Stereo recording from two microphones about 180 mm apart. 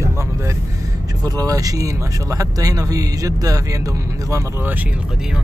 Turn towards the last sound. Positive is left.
turn(degrees=-10)  # may be behind; listen again after turning